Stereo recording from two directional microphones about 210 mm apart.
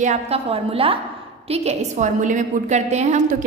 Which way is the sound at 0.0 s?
30° right (ahead or behind).